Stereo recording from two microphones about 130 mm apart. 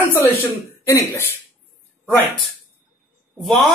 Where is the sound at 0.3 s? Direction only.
20° left (ahead or behind).